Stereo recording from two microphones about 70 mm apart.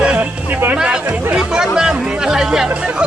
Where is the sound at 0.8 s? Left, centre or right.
Centre.